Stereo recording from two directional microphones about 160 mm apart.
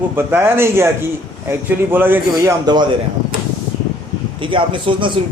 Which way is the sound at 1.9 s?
10° right (ahead or behind).